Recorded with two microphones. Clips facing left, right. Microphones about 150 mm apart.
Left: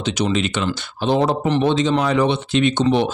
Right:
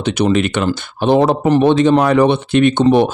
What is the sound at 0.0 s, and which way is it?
Speech, 55° right (ahead or behind).